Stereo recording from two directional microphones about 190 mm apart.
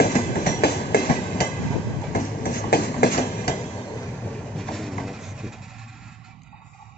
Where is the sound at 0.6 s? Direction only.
55° left (ahead or behind).